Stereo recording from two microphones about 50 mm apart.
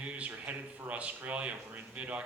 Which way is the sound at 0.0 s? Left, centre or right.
Right.